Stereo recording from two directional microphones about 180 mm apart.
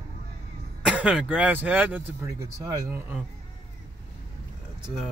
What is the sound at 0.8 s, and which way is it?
Speech, 5° right (ahead or behind).